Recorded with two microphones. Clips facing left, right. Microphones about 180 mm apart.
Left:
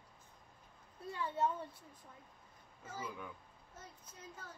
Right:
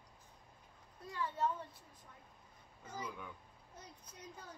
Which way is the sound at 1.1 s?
25° left (ahead or behind).